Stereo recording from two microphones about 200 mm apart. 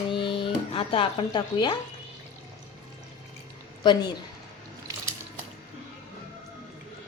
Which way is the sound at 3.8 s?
20° left (ahead or behind).